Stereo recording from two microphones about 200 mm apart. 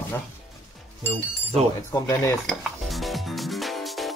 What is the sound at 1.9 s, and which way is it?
Speech, 15° left (ahead or behind).